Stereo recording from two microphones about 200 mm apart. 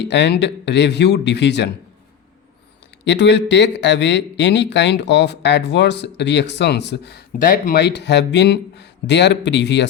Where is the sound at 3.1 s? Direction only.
60° left (ahead or behind).